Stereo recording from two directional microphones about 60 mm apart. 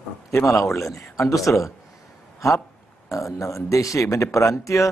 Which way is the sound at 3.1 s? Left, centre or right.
Left.